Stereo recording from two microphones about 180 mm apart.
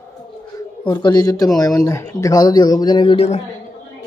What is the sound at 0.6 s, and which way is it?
A man's voice, 25° left (ahead or behind).